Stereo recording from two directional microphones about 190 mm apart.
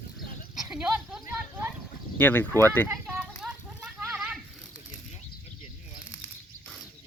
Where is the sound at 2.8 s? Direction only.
10° right (ahead or behind).